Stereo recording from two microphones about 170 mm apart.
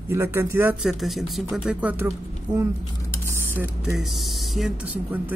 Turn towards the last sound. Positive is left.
turn(degrees=0)  # may be behind; listen again after turning